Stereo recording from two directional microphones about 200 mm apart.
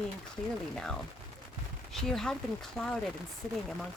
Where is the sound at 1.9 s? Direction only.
Centre (ahead or behind).